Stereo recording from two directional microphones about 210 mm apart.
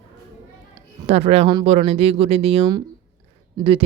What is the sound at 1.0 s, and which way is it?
Speech, 30° right (ahead or behind).